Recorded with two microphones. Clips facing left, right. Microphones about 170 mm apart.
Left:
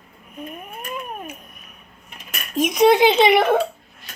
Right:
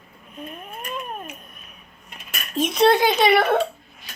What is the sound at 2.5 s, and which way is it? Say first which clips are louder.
A child's voice: left 3 dB; 10° left (ahead or behind).